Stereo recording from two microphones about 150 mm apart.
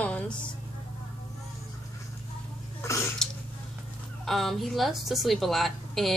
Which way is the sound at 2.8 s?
20° left (ahead or behind).